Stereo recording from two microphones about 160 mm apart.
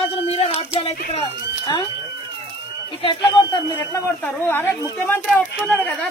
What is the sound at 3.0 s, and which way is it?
Speech, 30° left (ahead or behind).